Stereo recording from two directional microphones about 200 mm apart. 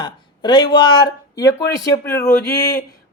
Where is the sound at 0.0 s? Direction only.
20° left (ahead or behind).